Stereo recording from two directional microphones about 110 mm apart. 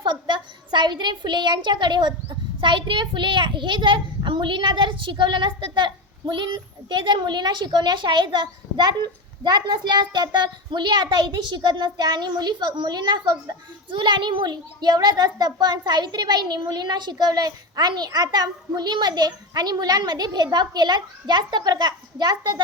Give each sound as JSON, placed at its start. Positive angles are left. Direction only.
{"t": 0.0, "sound": "a woman's voice", "side_deg": -45}